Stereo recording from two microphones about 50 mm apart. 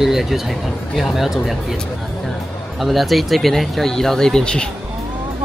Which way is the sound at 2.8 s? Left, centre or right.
Centre.